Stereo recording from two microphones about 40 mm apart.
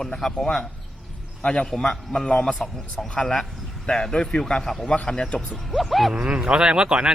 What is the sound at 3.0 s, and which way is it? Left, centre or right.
A man's voice, left.